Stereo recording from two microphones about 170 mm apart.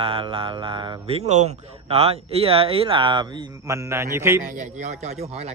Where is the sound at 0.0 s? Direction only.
30° right (ahead or behind); by 4.4 s 15° right (ahead or behind).